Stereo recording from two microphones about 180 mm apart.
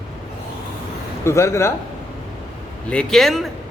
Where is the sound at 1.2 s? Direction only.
15° left (ahead or behind).